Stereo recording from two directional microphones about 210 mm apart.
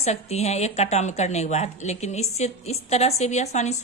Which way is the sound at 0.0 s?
30° left (ahead or behind).